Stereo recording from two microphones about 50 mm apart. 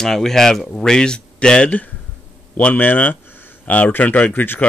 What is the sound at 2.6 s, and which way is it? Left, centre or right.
Speech, left.